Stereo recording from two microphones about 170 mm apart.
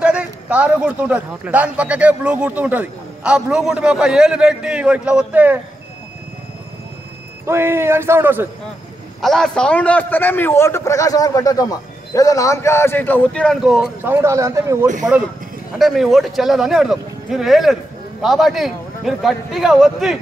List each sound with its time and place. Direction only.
0.0 s speech: 5° right (ahead or behind)
7.4 s speech: 15° right (ahead or behind)
9.2 s a man's voice: centre (ahead or behind)
14.1 s speech: 15° right (ahead or behind)
15.8 s speech: centre (ahead or behind)